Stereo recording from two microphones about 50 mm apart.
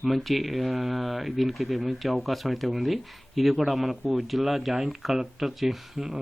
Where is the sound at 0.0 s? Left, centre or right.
Centre.